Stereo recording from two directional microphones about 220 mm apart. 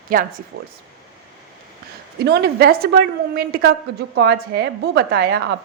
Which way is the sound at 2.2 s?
45° right (ahead or behind).